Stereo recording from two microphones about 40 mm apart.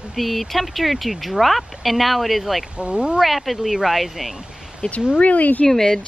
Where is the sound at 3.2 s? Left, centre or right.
Centre.